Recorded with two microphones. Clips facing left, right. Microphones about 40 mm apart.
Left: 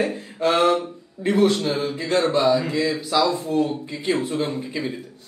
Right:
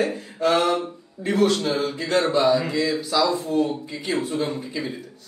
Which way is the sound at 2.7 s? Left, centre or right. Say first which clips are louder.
Left 1 dB; left.